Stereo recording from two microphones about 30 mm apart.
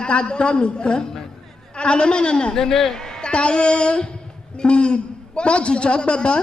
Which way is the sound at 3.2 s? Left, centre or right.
Left.